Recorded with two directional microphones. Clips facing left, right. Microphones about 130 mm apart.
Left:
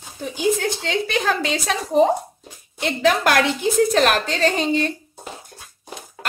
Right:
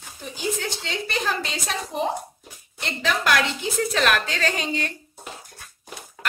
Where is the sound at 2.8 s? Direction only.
55° left (ahead or behind); by 4.6 s 35° left (ahead or behind).